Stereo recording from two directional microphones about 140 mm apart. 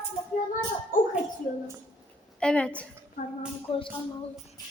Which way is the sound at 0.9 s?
75° left (ahead or behind).